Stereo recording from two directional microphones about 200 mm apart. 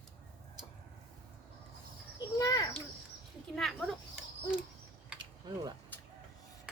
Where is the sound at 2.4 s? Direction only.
20° left (ahead or behind).